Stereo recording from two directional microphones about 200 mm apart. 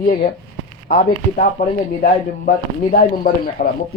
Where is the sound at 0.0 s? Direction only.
40° left (ahead or behind).